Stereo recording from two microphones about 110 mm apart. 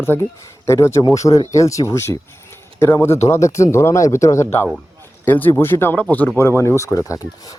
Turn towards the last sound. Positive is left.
turn(degrees=30)  # may be behind; listen again after turning